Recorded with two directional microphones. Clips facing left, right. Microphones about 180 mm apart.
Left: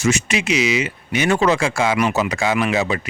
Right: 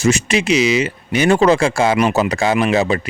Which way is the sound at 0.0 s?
35° right (ahead or behind).